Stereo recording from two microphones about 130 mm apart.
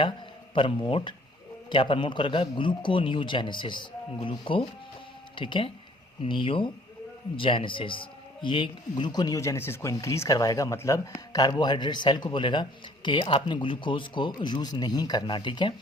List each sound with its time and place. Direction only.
0.5 s a man's voice: 40° left (ahead or behind)